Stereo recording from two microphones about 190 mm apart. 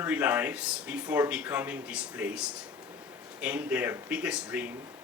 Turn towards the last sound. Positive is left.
turn(degrees=-5)  # may be behind; listen again after turning